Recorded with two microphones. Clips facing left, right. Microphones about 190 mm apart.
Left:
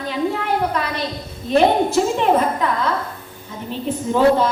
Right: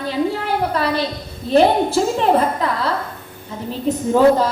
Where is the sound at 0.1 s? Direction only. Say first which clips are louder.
Even; 35° right (ahead or behind).